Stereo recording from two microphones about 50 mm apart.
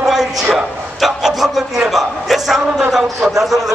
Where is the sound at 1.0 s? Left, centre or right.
Centre.